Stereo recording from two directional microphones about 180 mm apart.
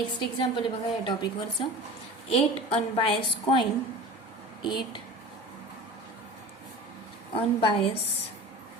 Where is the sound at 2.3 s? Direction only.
30° left (ahead or behind).